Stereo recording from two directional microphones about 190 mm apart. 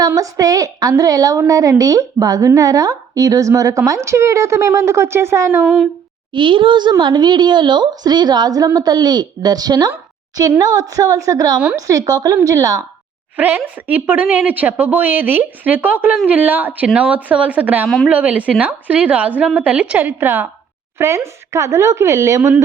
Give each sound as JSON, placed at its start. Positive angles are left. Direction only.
{"t": 0.0, "sound": "a woman's voice", "side_deg": -20}
{"t": 6.3, "sound": "a woman's voice", "side_deg": -25}
{"t": 17.8, "sound": "a woman's voice", "side_deg": 0}